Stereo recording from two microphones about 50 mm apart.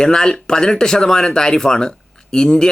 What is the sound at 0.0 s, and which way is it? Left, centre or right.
Speech, centre.